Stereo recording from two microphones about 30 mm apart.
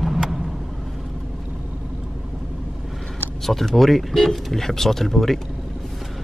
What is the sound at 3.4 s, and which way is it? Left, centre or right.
Speech, centre.